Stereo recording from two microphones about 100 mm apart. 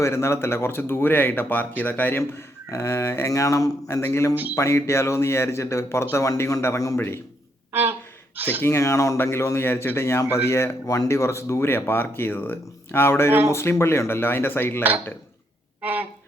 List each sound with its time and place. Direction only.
0.0 s speech: 30° left (ahead or behind)
2.6 s speech: 30° left (ahead or behind)
7.7 s a sound: 20° right (ahead or behind)
8.4 s speech: 20° right (ahead or behind)
8.6 s speech: 30° left (ahead or behind)
15.8 s a sound: 20° right (ahead or behind)